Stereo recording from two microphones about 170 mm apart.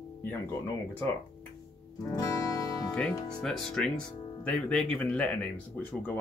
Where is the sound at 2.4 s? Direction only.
20° left (ahead or behind).